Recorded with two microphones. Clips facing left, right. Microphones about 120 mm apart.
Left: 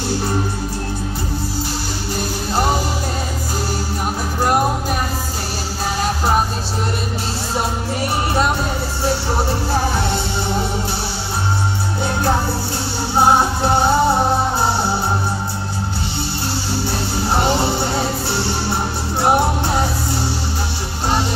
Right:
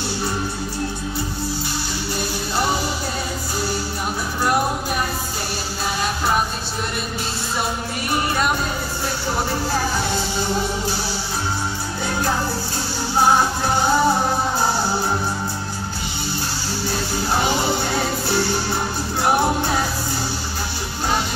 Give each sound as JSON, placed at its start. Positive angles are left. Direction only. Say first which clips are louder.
{"t": 2.1, "sound": "music", "louder": "left 4 dB", "side_deg": 45}
{"t": 9.7, "sound": "music", "louder": "left 3 dB", "side_deg": 25}
{"t": 12.0, "sound": "music", "louder": "left 3 dB", "side_deg": 25}
{"t": 16.8, "sound": "music", "louder": "left 2 dB", "side_deg": 30}